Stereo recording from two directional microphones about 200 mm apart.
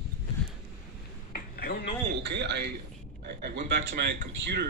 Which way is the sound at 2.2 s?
60° right (ahead or behind).